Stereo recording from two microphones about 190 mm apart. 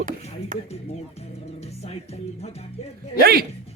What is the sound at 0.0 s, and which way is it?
Speech, 40° right (ahead or behind).